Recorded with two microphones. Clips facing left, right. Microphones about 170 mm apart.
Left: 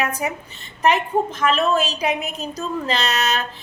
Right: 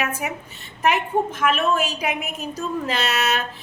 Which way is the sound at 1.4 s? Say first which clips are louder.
Left 3 dB; 10° right (ahead or behind).